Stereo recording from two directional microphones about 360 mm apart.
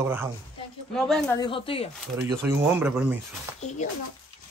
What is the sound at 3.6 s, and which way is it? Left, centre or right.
Speech, centre.